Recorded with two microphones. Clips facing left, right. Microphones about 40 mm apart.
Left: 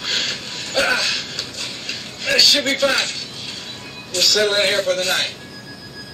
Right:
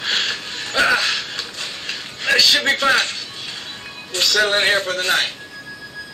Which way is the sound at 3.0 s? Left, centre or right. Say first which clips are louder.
Right 2 dB; centre.